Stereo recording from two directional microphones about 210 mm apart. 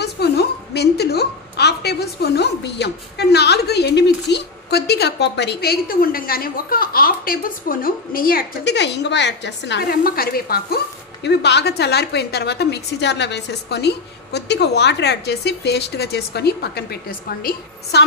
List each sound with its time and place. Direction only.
0.0 s a woman's voice: 50° left (ahead or behind)